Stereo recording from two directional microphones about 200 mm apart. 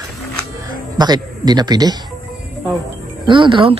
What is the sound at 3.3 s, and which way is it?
Speech, 25° right (ahead or behind).